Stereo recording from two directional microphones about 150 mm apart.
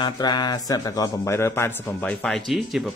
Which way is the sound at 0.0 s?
30° left (ahead or behind).